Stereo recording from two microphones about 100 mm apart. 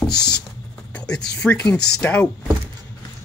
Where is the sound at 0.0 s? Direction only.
5° left (ahead or behind).